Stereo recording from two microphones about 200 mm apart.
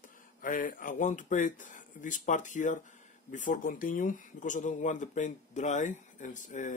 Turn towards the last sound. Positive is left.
turn(degrees=40)  # may be behind; listen again after turning